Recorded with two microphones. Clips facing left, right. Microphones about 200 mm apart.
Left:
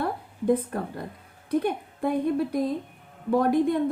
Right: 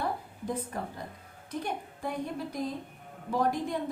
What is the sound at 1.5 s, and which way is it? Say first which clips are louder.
A woman's voice: left 10 dB; 60° left (ahead or behind).